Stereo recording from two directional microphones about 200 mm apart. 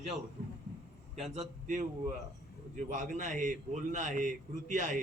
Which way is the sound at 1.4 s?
40° right (ahead or behind).